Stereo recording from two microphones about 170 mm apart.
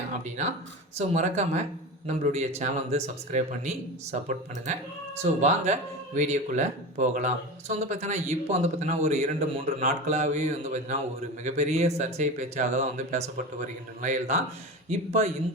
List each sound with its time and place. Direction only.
0.9 s speech: 40° right (ahead or behind)